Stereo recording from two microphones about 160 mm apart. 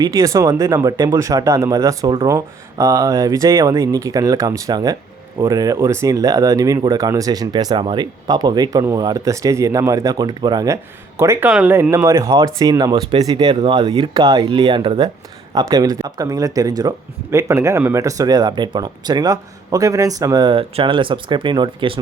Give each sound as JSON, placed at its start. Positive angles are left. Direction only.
{"t": 0.0, "sound": "speech", "side_deg": -20}